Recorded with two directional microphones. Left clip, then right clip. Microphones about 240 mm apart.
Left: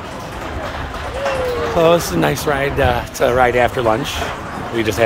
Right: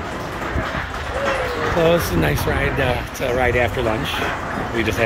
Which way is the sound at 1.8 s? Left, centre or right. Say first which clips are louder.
Left 4 dB; centre.